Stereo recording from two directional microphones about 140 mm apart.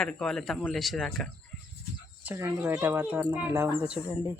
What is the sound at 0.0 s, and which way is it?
Speech, 5° left (ahead or behind).